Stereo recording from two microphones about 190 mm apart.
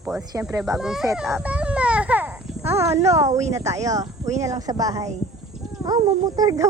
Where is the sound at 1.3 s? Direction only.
5° right (ahead or behind).